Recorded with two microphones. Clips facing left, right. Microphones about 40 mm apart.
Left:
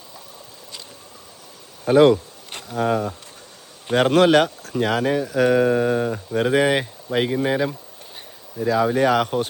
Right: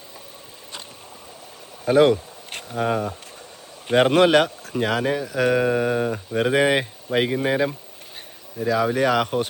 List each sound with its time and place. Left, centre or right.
1.9 s speech: left
2.7 s speech: centre
4.3 s speech: right
5.6 s speech: centre
6.3 s speech: centre
6.6 s speech: centre
8.6 s speech: right